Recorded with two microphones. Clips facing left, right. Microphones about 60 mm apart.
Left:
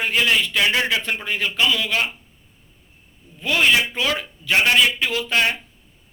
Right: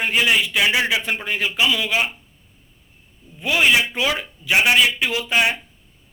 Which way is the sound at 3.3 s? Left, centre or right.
Centre.